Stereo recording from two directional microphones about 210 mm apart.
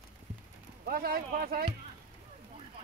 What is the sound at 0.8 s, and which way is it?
Speech, 45° right (ahead or behind).